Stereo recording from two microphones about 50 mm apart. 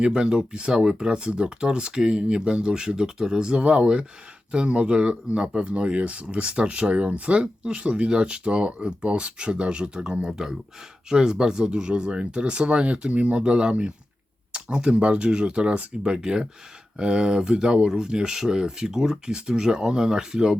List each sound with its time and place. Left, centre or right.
0.0 s speech: centre